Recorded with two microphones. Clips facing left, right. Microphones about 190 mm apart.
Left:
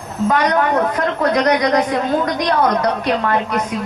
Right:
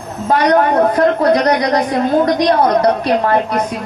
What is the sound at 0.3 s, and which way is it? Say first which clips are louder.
A woman's voice: right 4 dB; 35° right (ahead or behind).